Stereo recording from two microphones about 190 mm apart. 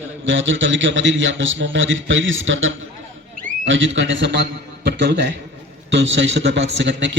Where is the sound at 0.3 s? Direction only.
80° right.